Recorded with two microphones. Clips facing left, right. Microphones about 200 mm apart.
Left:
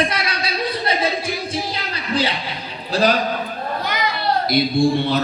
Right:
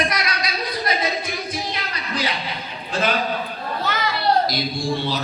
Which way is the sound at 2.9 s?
35° left (ahead or behind).